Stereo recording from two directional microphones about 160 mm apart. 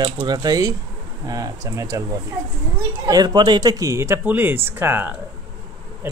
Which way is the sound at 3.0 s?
25° right (ahead or behind).